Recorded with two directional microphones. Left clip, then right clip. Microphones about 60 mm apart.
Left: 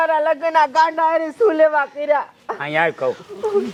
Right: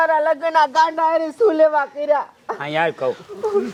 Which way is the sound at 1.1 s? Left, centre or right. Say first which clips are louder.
Even; right.